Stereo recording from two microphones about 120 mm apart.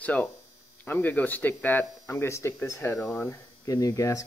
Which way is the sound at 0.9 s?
15° left (ahead or behind).